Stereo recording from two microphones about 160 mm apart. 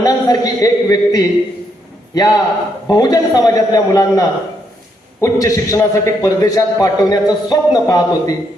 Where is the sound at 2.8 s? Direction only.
25° left (ahead or behind).